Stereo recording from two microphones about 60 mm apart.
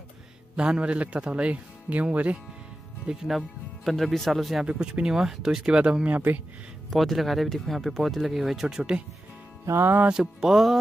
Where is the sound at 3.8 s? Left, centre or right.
Centre.